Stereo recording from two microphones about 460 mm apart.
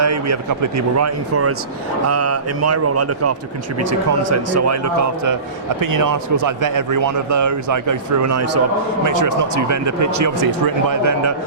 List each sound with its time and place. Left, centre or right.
0.0 s a man's voice: right